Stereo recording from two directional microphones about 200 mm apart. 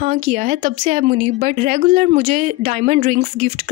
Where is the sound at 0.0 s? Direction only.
40° right (ahead or behind).